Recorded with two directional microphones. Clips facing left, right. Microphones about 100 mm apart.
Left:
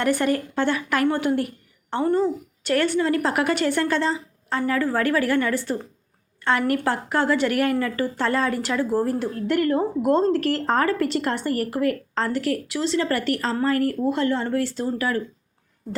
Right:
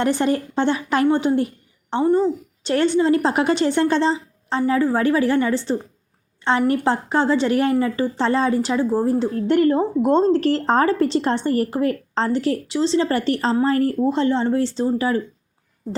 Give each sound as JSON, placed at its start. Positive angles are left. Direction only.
{"t": 0.0, "sound": "a woman's voice", "side_deg": -25}